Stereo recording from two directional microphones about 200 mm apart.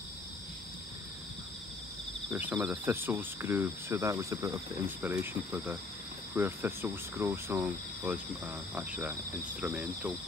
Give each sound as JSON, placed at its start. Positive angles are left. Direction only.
{"t": 2.3, "sound": "speech", "side_deg": -10}